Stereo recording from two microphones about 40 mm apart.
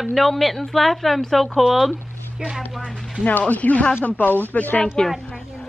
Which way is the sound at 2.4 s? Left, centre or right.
Right.